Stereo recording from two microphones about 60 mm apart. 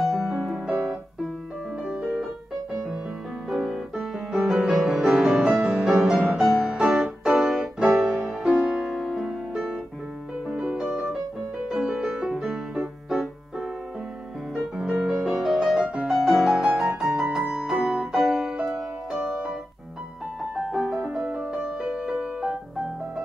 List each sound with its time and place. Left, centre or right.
0.0 s music: centre
1.9 s piano: centre
3.4 s music: centre
8.8 s music: centre
10.5 s music: centre
14.8 s music: centre
17.0 s piano: centre
20.5 s music: centre